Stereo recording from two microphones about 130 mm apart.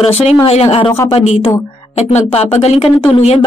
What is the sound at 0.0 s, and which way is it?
Speech, 50° left (ahead or behind).